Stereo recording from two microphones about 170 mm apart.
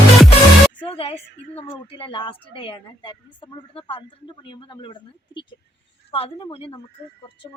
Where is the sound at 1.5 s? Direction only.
35° left (ahead or behind).